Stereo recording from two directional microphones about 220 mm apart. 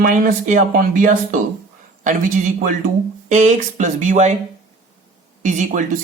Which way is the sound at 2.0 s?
35° right (ahead or behind).